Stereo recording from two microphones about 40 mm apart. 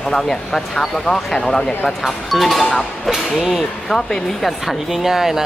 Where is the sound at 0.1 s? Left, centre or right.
Centre.